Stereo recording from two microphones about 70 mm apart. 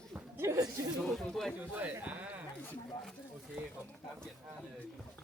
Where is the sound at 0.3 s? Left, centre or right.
Right.